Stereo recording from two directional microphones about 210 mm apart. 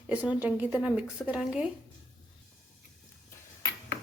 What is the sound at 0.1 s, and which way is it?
Speech, 5° right (ahead or behind).